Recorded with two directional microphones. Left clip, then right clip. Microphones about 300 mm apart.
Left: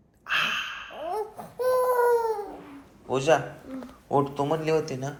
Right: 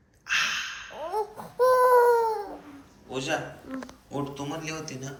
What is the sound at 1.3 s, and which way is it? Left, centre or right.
Baby cry, centre.